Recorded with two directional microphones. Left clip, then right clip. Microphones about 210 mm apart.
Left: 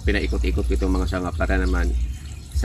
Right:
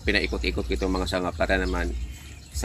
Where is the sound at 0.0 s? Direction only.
35° right (ahead or behind).